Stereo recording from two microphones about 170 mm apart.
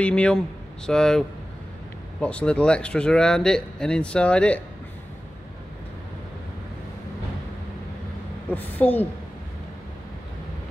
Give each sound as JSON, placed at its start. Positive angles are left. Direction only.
{"t": 0.0, "sound": "a woman's voice", "side_deg": 5}
{"t": 8.5, "sound": "a woman's voice", "side_deg": 10}